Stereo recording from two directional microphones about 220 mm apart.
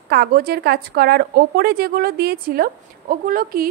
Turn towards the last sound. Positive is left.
turn(degrees=-40)  # may be behind; listen again after turning